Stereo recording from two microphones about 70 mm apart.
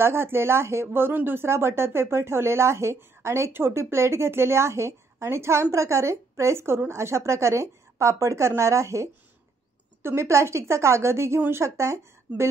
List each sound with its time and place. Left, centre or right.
0.0 s speech: right